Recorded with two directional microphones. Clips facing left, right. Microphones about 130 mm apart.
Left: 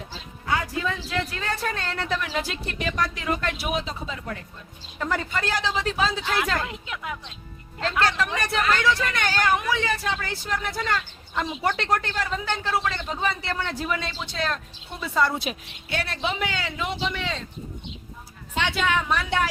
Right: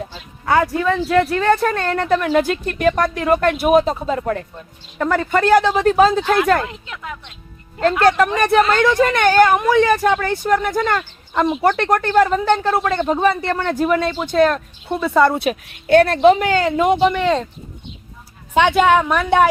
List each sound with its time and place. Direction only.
0.4 s speech: 65° right (ahead or behind)
6.8 s a woman's voice: 10° left (ahead or behind)
7.8 s speech: 50° right (ahead or behind)
18.6 s speech: 55° right (ahead or behind)